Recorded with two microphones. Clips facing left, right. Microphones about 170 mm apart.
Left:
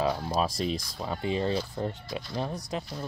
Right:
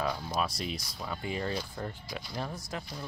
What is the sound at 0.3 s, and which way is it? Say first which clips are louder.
Speech: left 5 dB; 30° left (ahead or behind).